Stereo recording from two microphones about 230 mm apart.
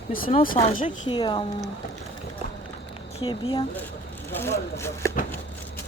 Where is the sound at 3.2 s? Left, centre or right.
Left.